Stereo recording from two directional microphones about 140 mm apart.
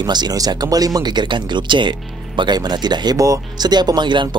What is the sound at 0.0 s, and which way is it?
Speech, 30° right (ahead or behind).